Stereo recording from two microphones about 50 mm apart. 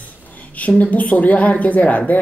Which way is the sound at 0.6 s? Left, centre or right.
Left.